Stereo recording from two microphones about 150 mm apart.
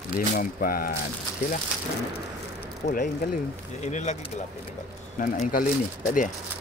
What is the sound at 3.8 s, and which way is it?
Speech, 50° left (ahead or behind).